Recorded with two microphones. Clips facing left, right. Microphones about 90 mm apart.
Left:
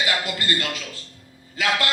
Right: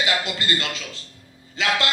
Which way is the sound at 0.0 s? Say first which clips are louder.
Right 1 dB; 25° right (ahead or behind).